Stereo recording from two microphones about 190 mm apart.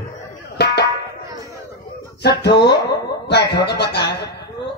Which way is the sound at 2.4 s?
60° left (ahead or behind).